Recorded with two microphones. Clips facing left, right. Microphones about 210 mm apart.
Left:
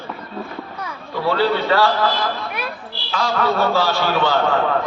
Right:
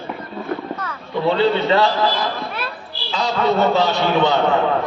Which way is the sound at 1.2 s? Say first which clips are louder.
Right 2 dB; 20° right (ahead or behind).